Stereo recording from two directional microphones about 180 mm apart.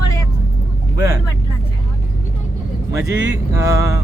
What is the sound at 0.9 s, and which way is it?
Speech, 20° right (ahead or behind).